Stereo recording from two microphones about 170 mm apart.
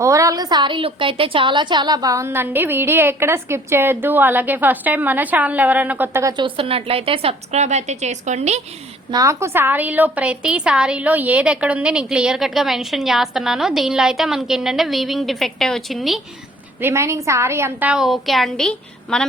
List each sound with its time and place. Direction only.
0.0 s a woman's voice: 20° right (ahead or behind)
6.3 s a woman's voice: 30° right (ahead or behind)
9.0 s a woman's voice: 20° right (ahead or behind); by 16.2 s centre (ahead or behind)
16.8 s a woman's voice: 15° right (ahead or behind); by 19.2 s 5° left (ahead or behind)